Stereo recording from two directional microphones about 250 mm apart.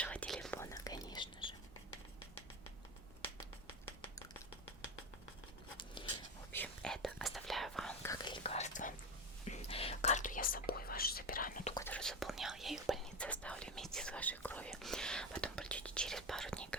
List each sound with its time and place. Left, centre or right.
0.0 s whispering: centre
5.9 s a sound: centre
6.6 s whispering: centre; by 11.7 s left
11.7 s whispering: centre